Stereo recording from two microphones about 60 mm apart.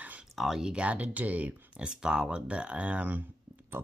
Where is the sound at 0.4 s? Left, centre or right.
Centre; by 1.9 s right.